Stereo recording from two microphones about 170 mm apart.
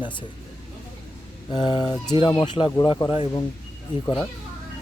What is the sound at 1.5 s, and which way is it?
Speech, 25° left (ahead or behind).